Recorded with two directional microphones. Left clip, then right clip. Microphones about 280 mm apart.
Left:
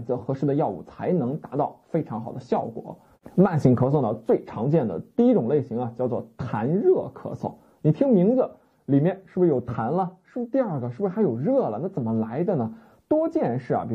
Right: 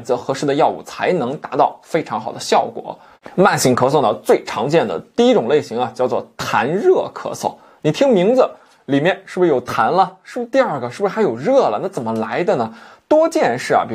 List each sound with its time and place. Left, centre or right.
0.1 s speech: centre
7.0 s speech: right
7.8 s speech: centre